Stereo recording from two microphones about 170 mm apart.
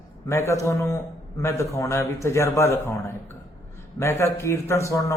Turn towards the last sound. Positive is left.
turn(degrees=15)  # may be behind; listen again after turning